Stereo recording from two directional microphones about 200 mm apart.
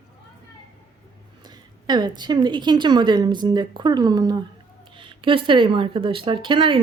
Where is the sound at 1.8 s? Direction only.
20° right (ahead or behind).